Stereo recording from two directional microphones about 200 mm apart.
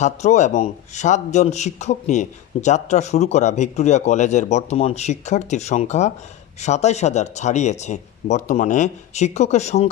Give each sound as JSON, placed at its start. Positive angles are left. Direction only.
{"t": 0.0, "sound": "speech", "side_deg": 35}